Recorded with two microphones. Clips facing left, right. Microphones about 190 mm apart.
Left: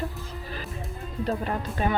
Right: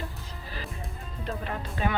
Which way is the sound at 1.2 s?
40° left (ahead or behind).